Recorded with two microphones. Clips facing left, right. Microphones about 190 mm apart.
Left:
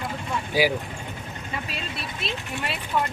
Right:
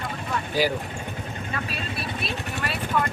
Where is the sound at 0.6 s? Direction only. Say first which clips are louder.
Left 2 dB; 10° left (ahead or behind).